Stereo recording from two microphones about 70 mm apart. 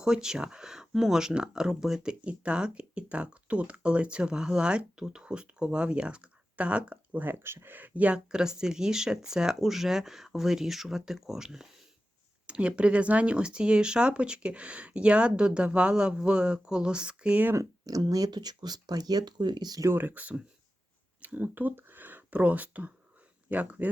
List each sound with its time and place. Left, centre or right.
0.0 s speech: centre
17.4 s speech: right
17.8 s speech: right
20.0 s speech: right